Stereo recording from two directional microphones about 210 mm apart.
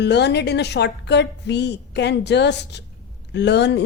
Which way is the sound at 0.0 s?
55° left (ahead or behind).